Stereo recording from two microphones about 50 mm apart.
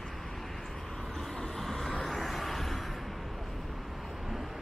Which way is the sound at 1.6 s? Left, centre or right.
Centre.